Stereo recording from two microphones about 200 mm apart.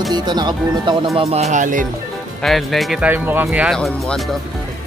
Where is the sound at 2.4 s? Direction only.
Centre (ahead or behind).